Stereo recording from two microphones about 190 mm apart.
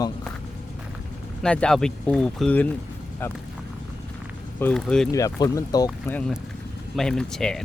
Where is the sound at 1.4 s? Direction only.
5° left (ahead or behind).